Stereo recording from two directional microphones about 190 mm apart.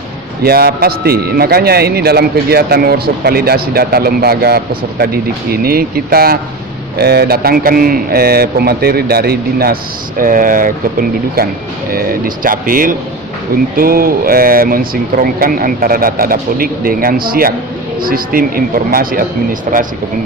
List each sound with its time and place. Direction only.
0.4 s a man's voice: 55° right (ahead or behind)